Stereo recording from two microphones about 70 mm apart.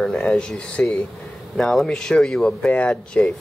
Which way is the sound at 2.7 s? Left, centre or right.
Centre.